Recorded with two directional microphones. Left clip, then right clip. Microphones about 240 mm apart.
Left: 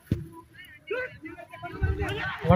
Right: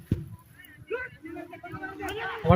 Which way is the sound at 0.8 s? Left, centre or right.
Left.